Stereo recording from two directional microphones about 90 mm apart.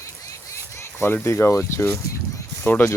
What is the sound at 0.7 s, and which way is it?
Speech, 30° left (ahead or behind).